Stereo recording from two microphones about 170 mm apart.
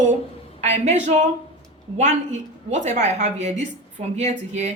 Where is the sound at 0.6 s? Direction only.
40° right (ahead or behind).